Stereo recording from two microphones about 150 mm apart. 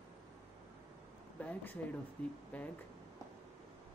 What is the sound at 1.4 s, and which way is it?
Speech, 10° left (ahead or behind).